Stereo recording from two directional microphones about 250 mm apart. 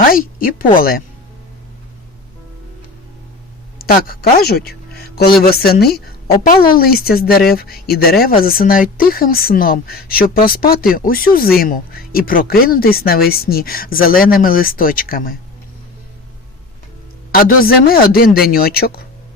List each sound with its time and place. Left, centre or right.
0.1 s a sound: left
0.8 s speech: left
3.8 s speech: left
17.3 s speech: left